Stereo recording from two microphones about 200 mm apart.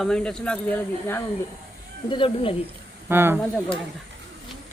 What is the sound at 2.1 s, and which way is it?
Speech, 25° left (ahead or behind).